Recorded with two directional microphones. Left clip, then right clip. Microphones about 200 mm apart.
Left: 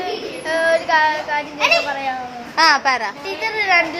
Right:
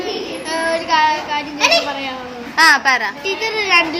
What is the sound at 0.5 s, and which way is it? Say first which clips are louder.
Child singing: left 1 dB; 5° left (ahead or behind).